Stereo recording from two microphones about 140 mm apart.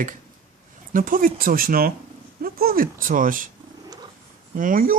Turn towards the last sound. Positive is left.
turn(degrees=-85)